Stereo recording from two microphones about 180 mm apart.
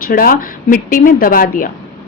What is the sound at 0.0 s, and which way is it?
A woman's voice, 55° left (ahead or behind).